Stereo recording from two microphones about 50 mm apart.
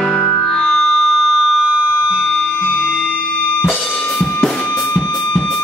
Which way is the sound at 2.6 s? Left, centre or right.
Left.